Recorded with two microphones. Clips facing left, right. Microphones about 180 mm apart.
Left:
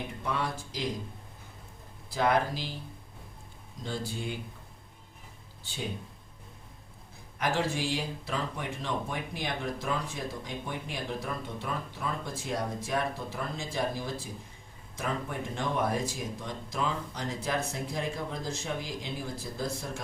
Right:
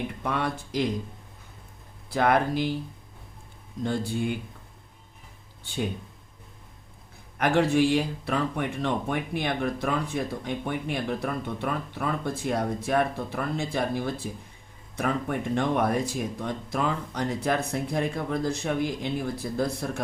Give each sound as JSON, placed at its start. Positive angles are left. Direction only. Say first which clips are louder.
{"t": 0.2, "sound": "speech", "louder": "right 2 dB", "side_deg": -60}
{"t": 2.0, "sound": "speech", "louder": "right 4 dB", "side_deg": -60}
{"t": 3.8, "sound": "speech", "louder": "right 8 dB", "side_deg": -55}
{"t": 7.3, "sound": "speech", "louder": "right 8 dB", "side_deg": -60}